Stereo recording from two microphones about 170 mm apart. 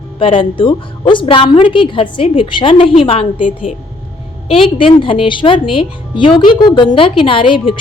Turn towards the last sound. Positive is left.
turn(degrees=30)  # may be behind; listen again after turning